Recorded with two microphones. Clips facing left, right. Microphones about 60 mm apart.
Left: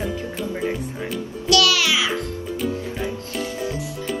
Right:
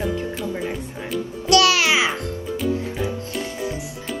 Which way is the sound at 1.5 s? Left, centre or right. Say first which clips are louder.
Right 2 dB; right.